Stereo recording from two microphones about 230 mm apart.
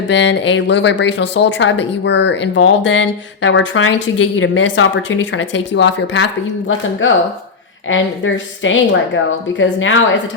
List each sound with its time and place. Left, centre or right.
0.1 s a woman's voice: left